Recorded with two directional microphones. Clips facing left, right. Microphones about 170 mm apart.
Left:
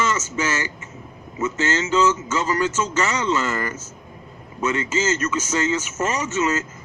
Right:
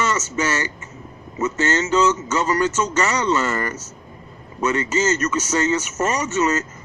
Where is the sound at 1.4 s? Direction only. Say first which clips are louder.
Right 2 dB; 40° right (ahead or behind).